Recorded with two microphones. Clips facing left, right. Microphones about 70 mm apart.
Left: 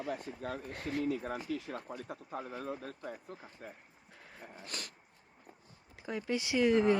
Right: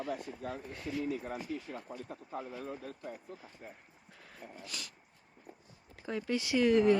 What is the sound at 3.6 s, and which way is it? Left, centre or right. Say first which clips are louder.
Speech: left 3 dB; left.